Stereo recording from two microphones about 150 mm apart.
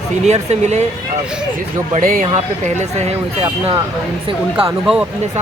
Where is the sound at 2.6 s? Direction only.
50° right (ahead or behind).